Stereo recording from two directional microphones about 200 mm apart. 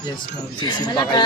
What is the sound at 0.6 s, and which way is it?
Speech, 20° left (ahead or behind).